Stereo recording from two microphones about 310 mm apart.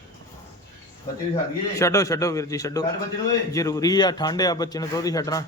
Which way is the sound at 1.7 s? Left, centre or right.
Centre.